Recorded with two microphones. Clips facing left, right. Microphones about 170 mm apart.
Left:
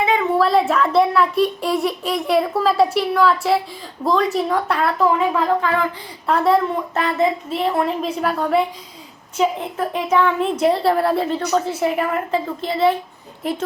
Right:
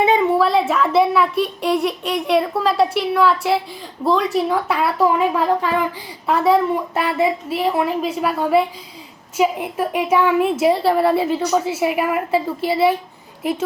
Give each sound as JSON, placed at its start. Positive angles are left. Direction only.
{"t": 0.0, "sound": "a sound", "side_deg": -20}
{"t": 0.3, "sound": "speech", "side_deg": 0}
{"t": 6.2, "sound": "a woman's voice", "side_deg": 0}